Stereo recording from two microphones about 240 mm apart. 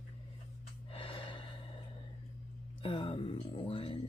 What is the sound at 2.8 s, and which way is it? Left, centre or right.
Speech, left.